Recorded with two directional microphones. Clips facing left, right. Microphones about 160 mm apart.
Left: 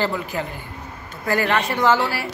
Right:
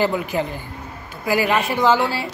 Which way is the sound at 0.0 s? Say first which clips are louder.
Right 4 dB; 20° right (ahead or behind).